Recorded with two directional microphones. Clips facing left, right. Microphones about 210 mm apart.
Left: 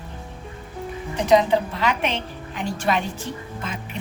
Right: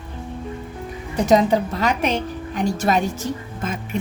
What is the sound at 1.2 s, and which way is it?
A woman's voice, 45° right (ahead or behind).